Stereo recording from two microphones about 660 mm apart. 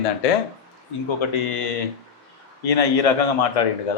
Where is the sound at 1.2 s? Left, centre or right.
Left.